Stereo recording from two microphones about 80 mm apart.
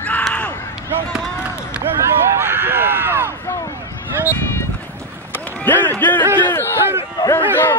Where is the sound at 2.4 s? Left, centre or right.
Right.